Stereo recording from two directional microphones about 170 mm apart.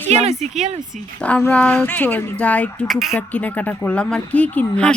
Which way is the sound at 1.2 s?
10° left (ahead or behind).